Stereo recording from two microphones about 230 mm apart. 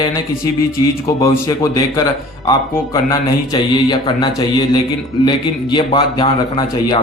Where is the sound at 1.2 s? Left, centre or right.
Centre.